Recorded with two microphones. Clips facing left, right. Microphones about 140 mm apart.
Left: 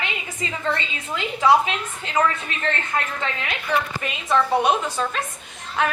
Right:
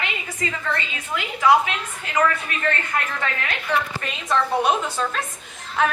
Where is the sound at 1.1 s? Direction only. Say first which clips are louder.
Even; 25° left (ahead or behind).